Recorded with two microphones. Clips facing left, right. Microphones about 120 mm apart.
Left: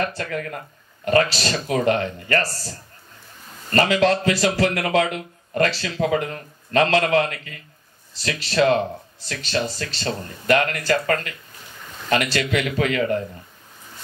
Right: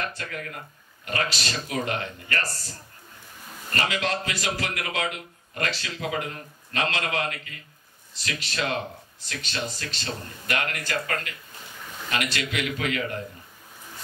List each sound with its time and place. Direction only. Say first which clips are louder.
0.0 s speech: left 8 dB; 35° left (ahead or behind)
3.7 s speech: left 10 dB; 40° left (ahead or behind)